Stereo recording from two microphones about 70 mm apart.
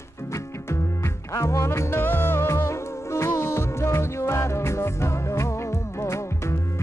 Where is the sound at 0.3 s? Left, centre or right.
Left.